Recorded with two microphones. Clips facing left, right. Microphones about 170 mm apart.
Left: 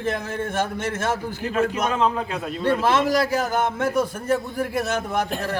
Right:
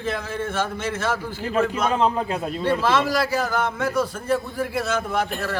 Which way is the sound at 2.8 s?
45° left (ahead or behind).